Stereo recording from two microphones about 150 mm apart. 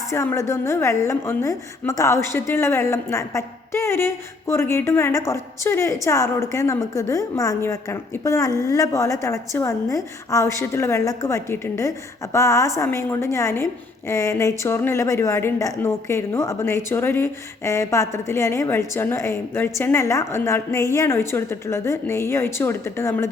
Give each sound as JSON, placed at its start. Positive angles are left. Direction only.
{"t": 0.1, "sound": "a woman's voice", "side_deg": 20}